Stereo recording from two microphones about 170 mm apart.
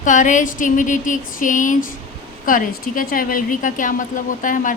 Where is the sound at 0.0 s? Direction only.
50° left (ahead or behind).